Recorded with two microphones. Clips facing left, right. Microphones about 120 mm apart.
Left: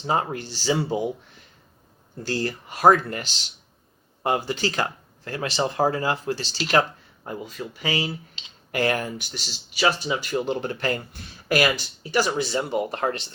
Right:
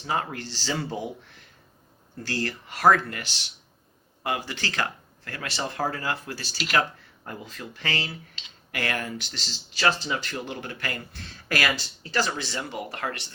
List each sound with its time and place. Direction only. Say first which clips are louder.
0.0 s speech: left 4 dB; 25° left (ahead or behind)
2.2 s speech: left 4 dB; 20° left (ahead or behind)
4.2 s speech: left 6 dB; 30° left (ahead or behind)
4.5 s speech: left 4 dB; 20° left (ahead or behind)
7.3 s speech: left 5 dB; 10° left (ahead or behind)
8.4 s speech: left 8 dB; 25° left (ahead or behind)